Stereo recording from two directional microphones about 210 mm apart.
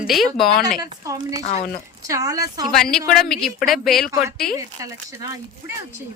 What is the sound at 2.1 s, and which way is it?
Speech, 15° right (ahead or behind).